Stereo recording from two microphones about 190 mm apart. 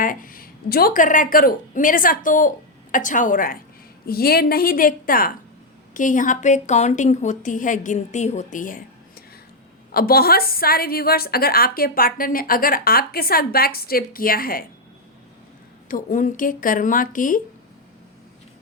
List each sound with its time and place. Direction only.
0.0 s a woman's voice: 45° left (ahead or behind)
15.9 s a woman's voice: 45° left (ahead or behind)